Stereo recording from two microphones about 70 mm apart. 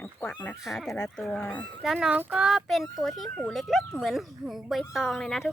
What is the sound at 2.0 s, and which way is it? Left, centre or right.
Speech, centre.